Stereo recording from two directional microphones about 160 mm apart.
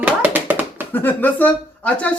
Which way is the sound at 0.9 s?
10° left (ahead or behind).